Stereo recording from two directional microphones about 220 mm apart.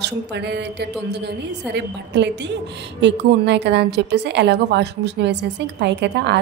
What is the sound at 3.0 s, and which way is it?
A woman's voice, 50° right (ahead or behind).